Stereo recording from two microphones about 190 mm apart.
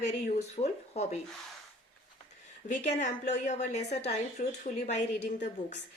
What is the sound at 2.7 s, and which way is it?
Speech, 40° left (ahead or behind).